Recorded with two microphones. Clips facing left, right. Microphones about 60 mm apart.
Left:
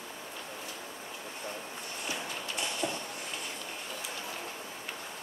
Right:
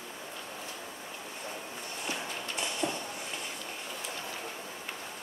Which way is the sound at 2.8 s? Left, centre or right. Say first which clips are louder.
Right 2 dB; centre.